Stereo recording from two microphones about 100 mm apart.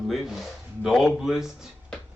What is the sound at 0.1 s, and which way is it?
Speech, centre (ahead or behind).